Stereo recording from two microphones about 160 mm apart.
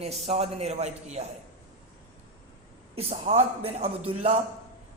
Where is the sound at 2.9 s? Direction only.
40° right (ahead or behind).